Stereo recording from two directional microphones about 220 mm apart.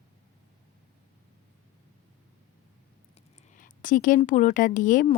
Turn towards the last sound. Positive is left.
turn(degrees=35)  # may be behind; listen again after turning